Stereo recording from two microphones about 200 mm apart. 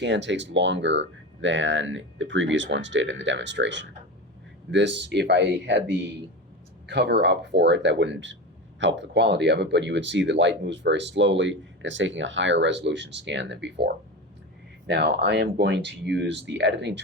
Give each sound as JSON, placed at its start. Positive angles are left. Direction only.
{"t": 0.0, "sound": "speech", "side_deg": -65}